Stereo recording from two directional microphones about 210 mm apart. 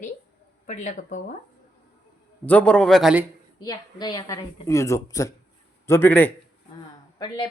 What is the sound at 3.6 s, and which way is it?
Speech, 20° left (ahead or behind).